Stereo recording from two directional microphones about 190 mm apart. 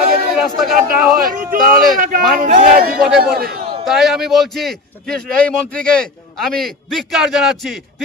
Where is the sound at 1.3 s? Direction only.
50° right (ahead or behind).